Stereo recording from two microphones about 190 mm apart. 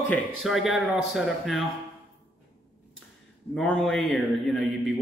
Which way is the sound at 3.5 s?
5° left (ahead or behind).